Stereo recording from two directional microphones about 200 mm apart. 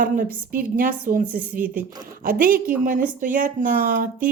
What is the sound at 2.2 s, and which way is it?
Speech, 45° right (ahead or behind).